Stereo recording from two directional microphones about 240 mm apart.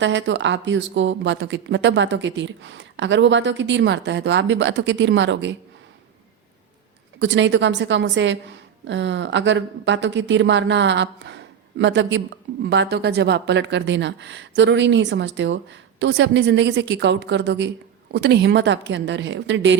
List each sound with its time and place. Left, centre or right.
0.0 s speech: right
7.2 s speech: right